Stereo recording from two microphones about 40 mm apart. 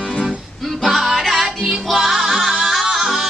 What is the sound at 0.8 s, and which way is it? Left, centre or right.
Music, centre.